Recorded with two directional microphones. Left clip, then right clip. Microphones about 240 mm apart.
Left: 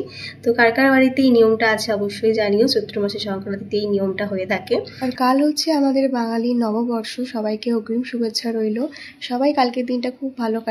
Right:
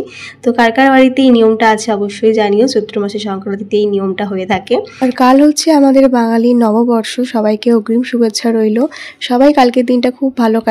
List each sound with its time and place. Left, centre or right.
0.5 s a woman's voice: right